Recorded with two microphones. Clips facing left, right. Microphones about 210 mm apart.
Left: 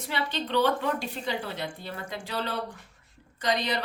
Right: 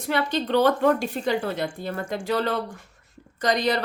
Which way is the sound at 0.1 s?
45° right (ahead or behind).